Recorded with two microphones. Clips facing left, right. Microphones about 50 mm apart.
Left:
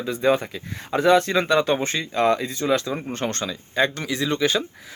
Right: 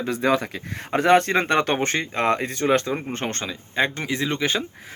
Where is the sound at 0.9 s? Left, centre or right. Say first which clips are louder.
Even; right.